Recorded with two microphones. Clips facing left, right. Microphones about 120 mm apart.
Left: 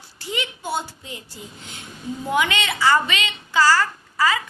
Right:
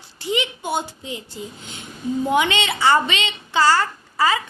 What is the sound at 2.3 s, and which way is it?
Speech, 25° right (ahead or behind).